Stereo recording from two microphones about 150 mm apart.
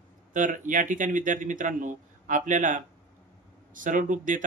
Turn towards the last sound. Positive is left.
turn(degrees=-60)  # may be behind; listen again after turning